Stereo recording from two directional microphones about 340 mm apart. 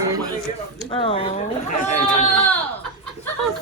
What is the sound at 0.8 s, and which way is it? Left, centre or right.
Speech, centre.